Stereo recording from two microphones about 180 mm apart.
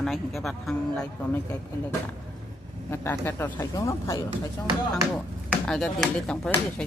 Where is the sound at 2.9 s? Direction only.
15° left (ahead or behind).